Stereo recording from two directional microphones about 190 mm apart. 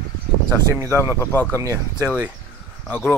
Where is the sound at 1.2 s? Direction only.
10° left (ahead or behind).